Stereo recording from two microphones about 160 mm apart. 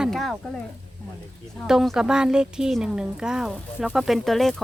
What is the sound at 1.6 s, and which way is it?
A woman's voice, centre (ahead or behind).